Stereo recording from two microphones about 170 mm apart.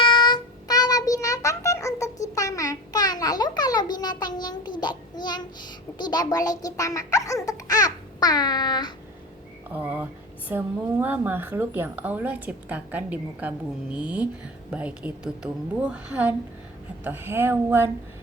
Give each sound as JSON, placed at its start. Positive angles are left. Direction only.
{"t": 0.0, "sound": "child singing", "side_deg": 25}
{"t": 9.7, "sound": "a sound", "side_deg": -10}
{"t": 10.5, "sound": "a woman's voice", "side_deg": -10}